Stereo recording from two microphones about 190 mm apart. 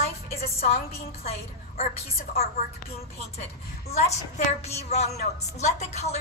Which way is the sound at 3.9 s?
35° left (ahead or behind).